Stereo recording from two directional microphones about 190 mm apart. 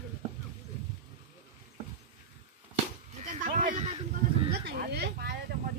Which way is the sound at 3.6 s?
45° right (ahead or behind).